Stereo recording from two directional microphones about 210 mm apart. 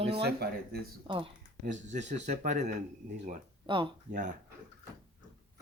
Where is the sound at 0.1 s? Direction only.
50° right (ahead or behind).